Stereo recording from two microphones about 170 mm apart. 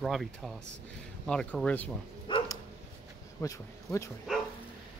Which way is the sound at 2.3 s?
30° left (ahead or behind).